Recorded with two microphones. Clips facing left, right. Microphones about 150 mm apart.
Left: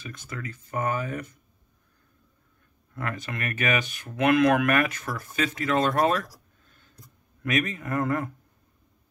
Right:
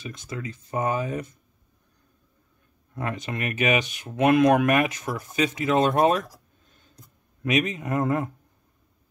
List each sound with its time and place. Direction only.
0.0 s speech: 20° right (ahead or behind)
2.9 s speech: 20° right (ahead or behind)
7.4 s speech: 20° right (ahead or behind)